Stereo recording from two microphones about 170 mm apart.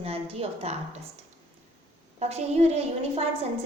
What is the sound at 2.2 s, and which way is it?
A woman's voice, 40° right (ahead or behind).